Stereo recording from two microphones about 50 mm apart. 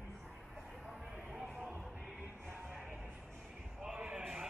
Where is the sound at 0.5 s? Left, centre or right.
Centre.